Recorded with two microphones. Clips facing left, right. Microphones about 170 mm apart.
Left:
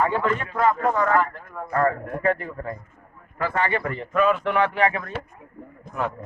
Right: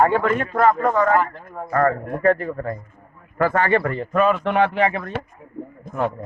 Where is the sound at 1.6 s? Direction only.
40° right (ahead or behind).